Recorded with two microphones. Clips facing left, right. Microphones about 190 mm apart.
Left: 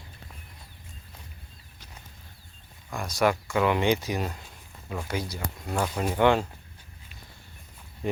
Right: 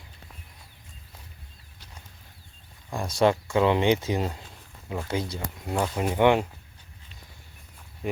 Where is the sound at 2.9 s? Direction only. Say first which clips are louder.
Right 3 dB; 25° right (ahead or behind).